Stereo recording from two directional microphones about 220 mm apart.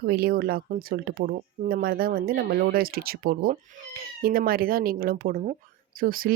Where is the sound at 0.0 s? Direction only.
45° right (ahead or behind).